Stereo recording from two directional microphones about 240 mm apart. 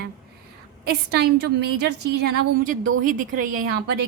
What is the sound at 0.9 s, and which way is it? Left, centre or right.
A woman's voice, right.